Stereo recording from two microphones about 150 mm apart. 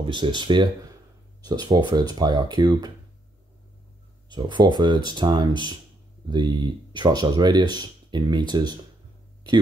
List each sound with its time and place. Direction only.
0.0 s speech: 30° right (ahead or behind)
4.3 s speech: 30° right (ahead or behind)